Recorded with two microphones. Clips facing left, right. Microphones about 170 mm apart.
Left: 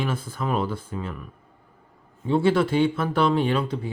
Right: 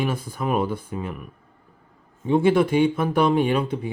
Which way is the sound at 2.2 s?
15° right (ahead or behind).